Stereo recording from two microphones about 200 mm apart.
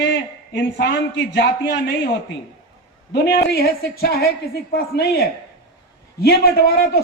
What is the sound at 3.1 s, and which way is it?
A man's voice, 55° left (ahead or behind).